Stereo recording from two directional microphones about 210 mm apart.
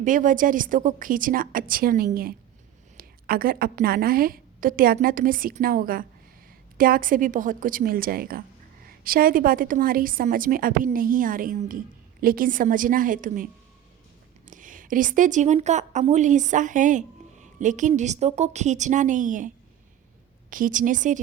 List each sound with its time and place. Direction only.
0.0 s a woman's voice: 40° right (ahead or behind)
14.5 s a woman's voice: 40° right (ahead or behind)
20.5 s a woman's voice: 40° right (ahead or behind)